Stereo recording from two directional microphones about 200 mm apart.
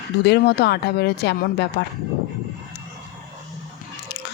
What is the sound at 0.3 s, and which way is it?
Speech, 55° left (ahead or behind).